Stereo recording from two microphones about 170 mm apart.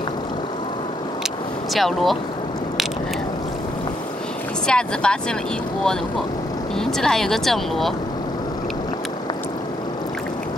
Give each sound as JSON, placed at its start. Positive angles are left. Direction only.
{"t": 1.7, "sound": "speech", "side_deg": 0}
{"t": 4.6, "sound": "speech", "side_deg": 5}
{"t": 6.8, "sound": "speech", "side_deg": 5}